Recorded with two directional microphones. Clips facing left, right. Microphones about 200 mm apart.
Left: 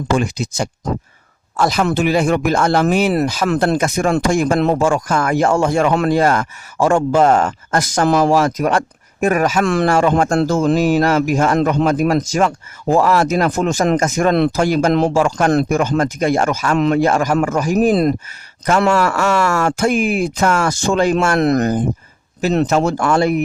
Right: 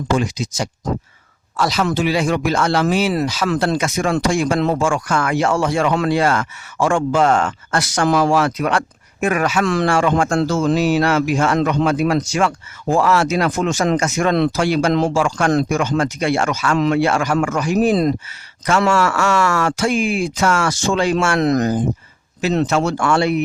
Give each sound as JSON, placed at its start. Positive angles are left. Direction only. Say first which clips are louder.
{"t": 0.2, "sound": "a man's voice", "louder": "left 2 dB", "side_deg": 50}
{"t": 15.1, "sound": "a man's voice", "louder": "left 2 dB", "side_deg": 40}
{"t": 17.8, "sound": "speech", "louder": "left 2 dB", "side_deg": 60}
{"t": 18.9, "sound": "speech", "louder": "left 1 dB", "side_deg": 40}
{"t": 22.7, "sound": "a man's voice", "louder": "left 2 dB", "side_deg": 40}